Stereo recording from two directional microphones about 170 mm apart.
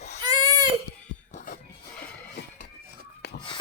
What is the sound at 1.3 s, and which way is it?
Music, 50° left (ahead or behind).